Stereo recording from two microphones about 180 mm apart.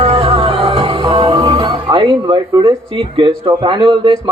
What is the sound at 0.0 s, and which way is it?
Music, 30° right (ahead or behind).